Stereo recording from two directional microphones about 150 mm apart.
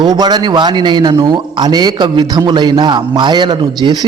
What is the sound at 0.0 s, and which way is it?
A man's voice, 25° right (ahead or behind).